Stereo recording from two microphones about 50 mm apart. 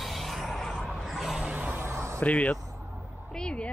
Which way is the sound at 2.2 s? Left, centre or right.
Left.